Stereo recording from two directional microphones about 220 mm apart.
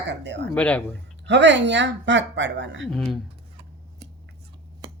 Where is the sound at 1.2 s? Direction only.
55° right (ahead or behind).